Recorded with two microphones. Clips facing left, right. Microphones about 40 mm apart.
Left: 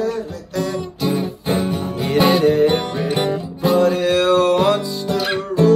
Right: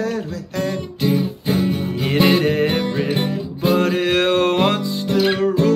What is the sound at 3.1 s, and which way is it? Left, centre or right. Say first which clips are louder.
Music: left 2 dB; left.